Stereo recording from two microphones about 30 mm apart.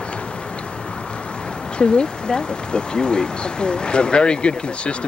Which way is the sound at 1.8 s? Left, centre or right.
Left.